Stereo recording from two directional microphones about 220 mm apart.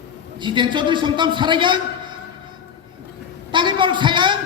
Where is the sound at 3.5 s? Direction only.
20° right (ahead or behind).